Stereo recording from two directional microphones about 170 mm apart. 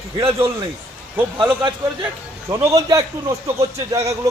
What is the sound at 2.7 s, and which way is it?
Speech, 20° right (ahead or behind).